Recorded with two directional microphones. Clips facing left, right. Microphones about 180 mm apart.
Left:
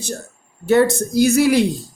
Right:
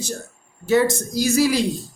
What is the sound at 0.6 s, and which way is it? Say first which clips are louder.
Speech: left 3 dB; 60° left (ahead or behind).